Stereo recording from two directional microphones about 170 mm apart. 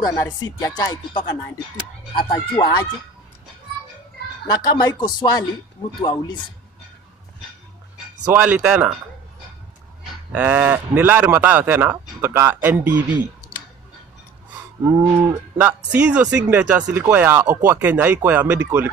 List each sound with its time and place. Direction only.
0.0 s a man's voice: 20° left (ahead or behind)
2.2 s a man's voice: 25° left (ahead or behind)
4.5 s a man's voice: 25° left (ahead or behind)
8.3 s speech: 10° right (ahead or behind)
10.3 s speech: 10° right (ahead or behind)
14.9 s speech: 20° right (ahead or behind)